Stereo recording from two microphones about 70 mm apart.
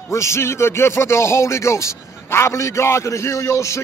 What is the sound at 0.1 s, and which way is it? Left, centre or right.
A man's voice, left.